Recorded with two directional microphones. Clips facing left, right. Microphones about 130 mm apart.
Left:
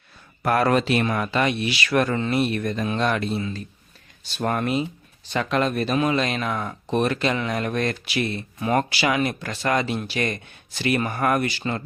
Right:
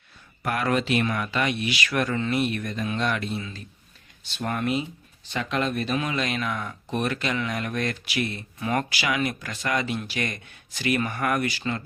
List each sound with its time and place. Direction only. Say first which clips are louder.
0.4 s speech: left 5 dB; 40° left (ahead or behind)